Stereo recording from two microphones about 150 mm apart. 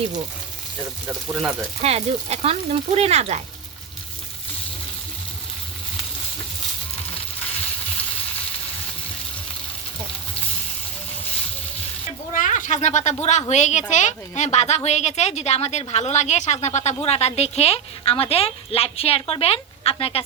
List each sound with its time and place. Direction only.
1.8 s speech: 45° right (ahead or behind)
12.3 s a sound: 60° left (ahead or behind)
13.5 s a woman's voice: 50° left (ahead or behind)